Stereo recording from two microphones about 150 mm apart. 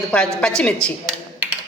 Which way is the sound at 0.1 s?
5° left (ahead or behind).